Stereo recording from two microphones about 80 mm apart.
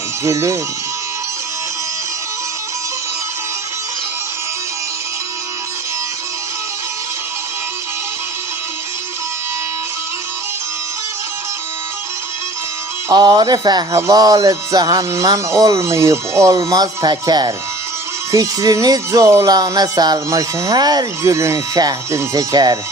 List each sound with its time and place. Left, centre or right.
0.3 s speech: right
13.1 s speech: right
18.3 s speech: right
20.1 s speech: right
20.7 s speech: right